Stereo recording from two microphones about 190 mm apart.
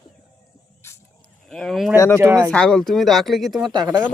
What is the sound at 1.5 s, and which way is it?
Speech, centre (ahead or behind).